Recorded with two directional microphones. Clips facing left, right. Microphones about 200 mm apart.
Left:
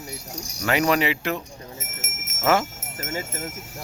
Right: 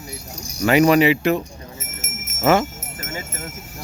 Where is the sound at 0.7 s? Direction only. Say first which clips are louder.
Right 7 dB; 10° right (ahead or behind).